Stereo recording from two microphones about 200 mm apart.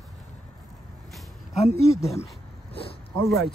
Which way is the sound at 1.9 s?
15° left (ahead or behind).